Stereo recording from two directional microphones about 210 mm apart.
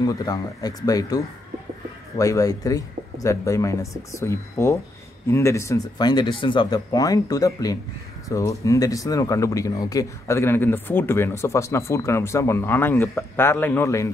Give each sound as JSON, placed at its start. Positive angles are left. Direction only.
{"t": 0.0, "sound": "speech", "side_deg": 20}